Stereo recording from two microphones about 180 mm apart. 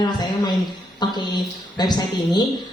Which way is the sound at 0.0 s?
25° left (ahead or behind).